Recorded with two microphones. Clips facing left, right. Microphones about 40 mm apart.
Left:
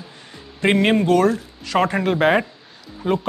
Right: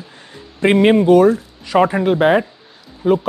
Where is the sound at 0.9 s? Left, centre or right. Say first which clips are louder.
Right 6 dB; centre.